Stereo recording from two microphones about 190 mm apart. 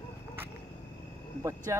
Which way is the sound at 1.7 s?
15° right (ahead or behind).